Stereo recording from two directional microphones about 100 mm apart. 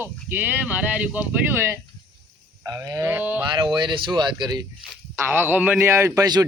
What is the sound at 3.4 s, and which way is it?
Speech, 50° right (ahead or behind).